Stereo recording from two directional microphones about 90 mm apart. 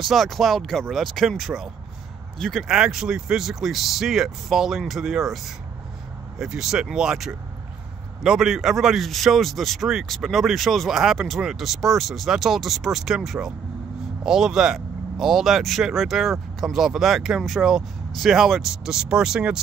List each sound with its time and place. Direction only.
0.0 s speech: centre (ahead or behind)
2.7 s speech: 5° right (ahead or behind)